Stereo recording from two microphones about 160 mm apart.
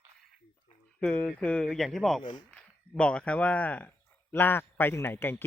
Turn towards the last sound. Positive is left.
turn(degrees=15)  # may be behind; listen again after turning